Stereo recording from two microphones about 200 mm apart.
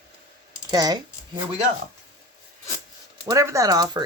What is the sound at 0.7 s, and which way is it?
Speech, 20° right (ahead or behind).